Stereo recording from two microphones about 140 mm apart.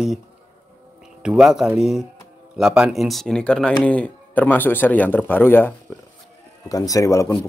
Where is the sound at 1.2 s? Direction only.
5° right (ahead or behind); by 5.7 s 15° left (ahead or behind).